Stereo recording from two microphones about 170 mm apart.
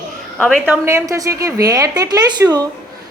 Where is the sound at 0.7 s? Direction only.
15° right (ahead or behind).